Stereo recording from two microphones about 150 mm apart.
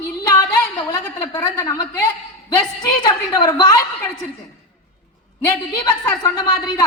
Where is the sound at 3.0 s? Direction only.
25° left (ahead or behind).